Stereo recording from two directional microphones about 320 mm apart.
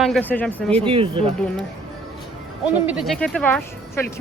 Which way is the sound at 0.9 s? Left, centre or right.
Centre.